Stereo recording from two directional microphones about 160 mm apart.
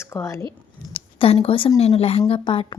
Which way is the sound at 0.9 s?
35° left (ahead or behind).